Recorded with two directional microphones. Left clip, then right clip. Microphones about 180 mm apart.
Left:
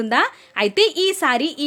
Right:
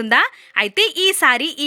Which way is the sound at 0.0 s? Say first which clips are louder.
Right 3 dB; 15° right (ahead or behind).